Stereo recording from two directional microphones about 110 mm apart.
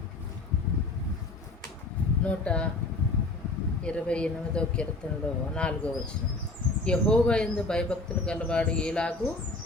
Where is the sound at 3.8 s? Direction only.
10° left (ahead or behind).